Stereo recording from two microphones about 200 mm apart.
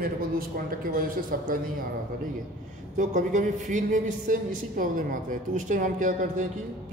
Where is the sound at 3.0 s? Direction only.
40° right (ahead or behind).